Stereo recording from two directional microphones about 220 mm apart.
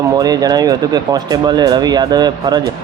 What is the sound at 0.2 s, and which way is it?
Speech, 15° right (ahead or behind).